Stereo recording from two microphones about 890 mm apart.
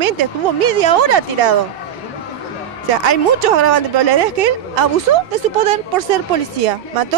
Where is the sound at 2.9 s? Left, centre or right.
Right.